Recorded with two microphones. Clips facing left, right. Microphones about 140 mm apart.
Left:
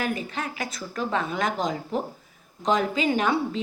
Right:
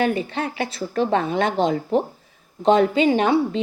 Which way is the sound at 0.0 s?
30° right (ahead or behind).